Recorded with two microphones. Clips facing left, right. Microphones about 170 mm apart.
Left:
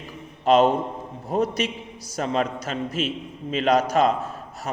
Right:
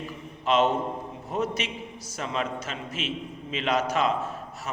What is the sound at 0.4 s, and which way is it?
A man's voice, 40° left (ahead or behind).